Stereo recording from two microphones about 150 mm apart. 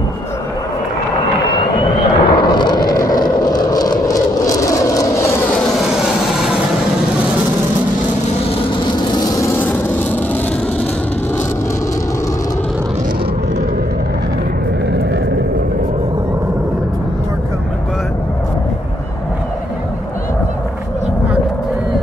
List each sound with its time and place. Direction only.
1.6 s a sound: 35° left (ahead or behind)
3.4 s vehicle: 25° left (ahead or behind)
5.8 s vehicle: centre (ahead or behind)
9.1 s vehicle: 25° left (ahead or behind)